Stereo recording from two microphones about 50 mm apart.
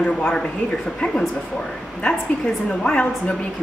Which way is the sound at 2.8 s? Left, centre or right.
Left.